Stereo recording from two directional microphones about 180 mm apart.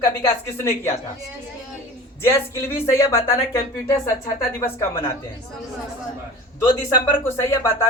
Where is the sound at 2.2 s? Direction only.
15° left (ahead or behind).